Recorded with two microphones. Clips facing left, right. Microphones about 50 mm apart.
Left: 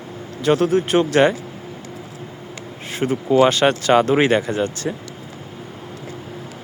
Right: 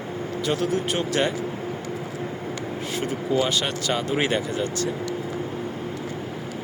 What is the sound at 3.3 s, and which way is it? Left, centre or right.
Speech, left.